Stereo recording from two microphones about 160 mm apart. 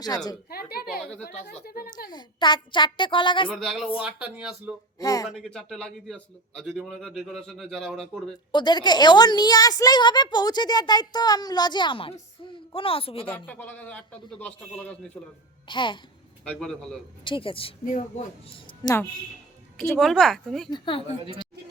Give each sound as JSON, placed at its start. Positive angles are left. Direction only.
{"t": 0.5, "sound": "a sound", "side_deg": 75}
{"t": 1.2, "sound": "speech", "side_deg": 75}
{"t": 2.0, "sound": "a woman's voice", "side_deg": 25}
{"t": 3.5, "sound": "a man's voice", "side_deg": 0}
{"t": 4.9, "sound": "a woman's voice", "side_deg": 20}
{"t": 5.3, "sound": "a man's voice", "side_deg": 0}
{"t": 8.5, "sound": "a woman's voice", "side_deg": 25}
{"t": 13.3, "sound": "a man's voice", "side_deg": 10}
{"t": 15.6, "sound": "a woman's voice", "side_deg": 30}
{"t": 16.4, "sound": "a man's voice", "side_deg": 5}
{"t": 17.2, "sound": "a woman's voice", "side_deg": 35}
{"t": 18.8, "sound": "a woman's voice", "side_deg": 25}
{"t": 19.8, "sound": "a man's voice", "side_deg": 0}
{"t": 20.7, "sound": "a woman's voice", "side_deg": 30}